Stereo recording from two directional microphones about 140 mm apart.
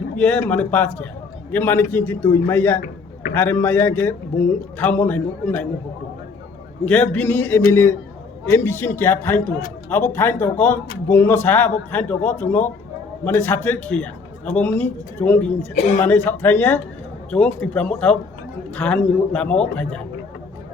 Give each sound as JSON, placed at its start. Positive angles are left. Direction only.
{"t": 0.4, "sound": "a man's voice", "side_deg": 10}
{"t": 6.8, "sound": "a man's voice", "side_deg": 10}